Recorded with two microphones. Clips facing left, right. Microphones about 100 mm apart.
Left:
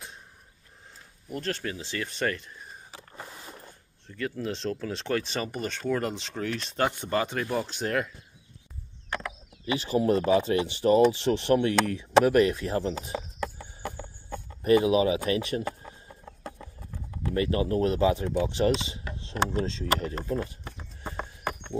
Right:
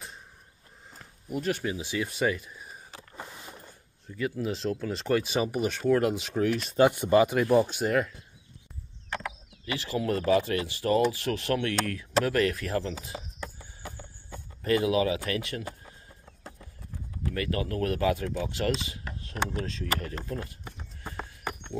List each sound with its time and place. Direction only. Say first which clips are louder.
1.3 s speech: right 3 dB; 10° right (ahead or behind)
4.1 s speech: right 1 dB; 5° right (ahead or behind)
9.7 s speech: left 5 dB; 25° left (ahead or behind)
13.4 s horse: left 7 dB; 65° left (ahead or behind)
14.6 s speech: left 3 dB; 20° left (ahead or behind)
15.6 s chicken: left 6 dB; 60° left (ahead or behind)
17.3 s speech: left 5 dB; 25° left (ahead or behind)
21.0 s horse: left 3 dB; 20° left (ahead or behind)